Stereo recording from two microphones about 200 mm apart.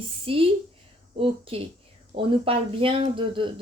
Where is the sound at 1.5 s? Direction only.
30° right (ahead or behind).